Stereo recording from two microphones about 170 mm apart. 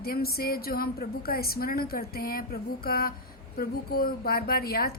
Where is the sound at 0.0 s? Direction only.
65° left (ahead or behind).